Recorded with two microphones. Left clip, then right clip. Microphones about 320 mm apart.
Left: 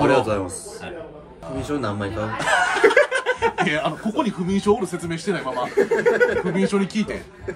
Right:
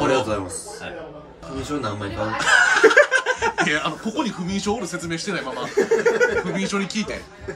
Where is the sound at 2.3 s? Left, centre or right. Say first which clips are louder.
Right 4 dB; centre.